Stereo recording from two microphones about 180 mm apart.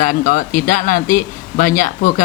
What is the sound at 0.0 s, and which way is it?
Speech, 50° left (ahead or behind).